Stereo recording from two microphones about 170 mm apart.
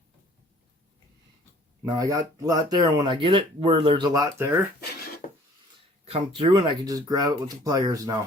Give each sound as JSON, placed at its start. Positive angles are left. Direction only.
{"t": 1.8, "sound": "speech", "side_deg": -20}
{"t": 4.8, "sound": "a sound", "side_deg": 60}
{"t": 6.1, "sound": "speech", "side_deg": -35}